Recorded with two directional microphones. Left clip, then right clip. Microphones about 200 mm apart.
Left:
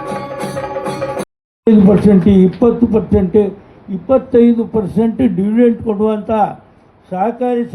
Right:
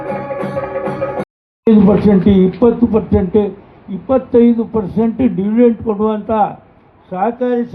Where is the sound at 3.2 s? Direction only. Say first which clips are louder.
Left 3 dB; 50° left (ahead or behind).